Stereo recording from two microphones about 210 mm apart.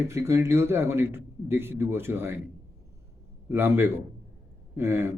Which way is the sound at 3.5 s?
10° right (ahead or behind).